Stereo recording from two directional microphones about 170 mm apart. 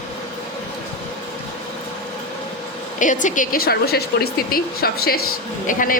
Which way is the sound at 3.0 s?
50° left (ahead or behind).